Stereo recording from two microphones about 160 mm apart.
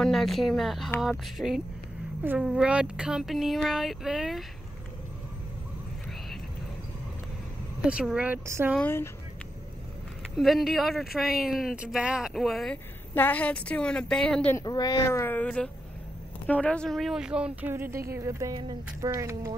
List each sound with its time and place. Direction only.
0.0 s speech: centre (ahead or behind)
7.8 s speech: 5° right (ahead or behind)
8.7 s a woman's voice: 15° left (ahead or behind)
10.3 s speech: centre (ahead or behind)
13.1 s a woman's voice: 10° left (ahead or behind)
14.6 s a woman's voice: 25° left (ahead or behind); by 19.5 s 20° right (ahead or behind)